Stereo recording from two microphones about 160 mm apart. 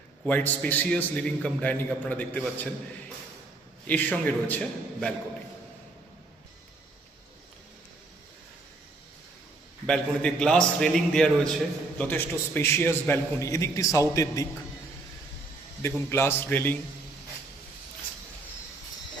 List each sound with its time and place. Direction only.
0.3 s a man's voice: 10° left (ahead or behind)
3.8 s a man's voice: 10° left (ahead or behind)
9.8 s a man's voice: 5° left (ahead or behind); by 14.4 s 20° left (ahead or behind)
15.8 s a man's voice: 15° left (ahead or behind)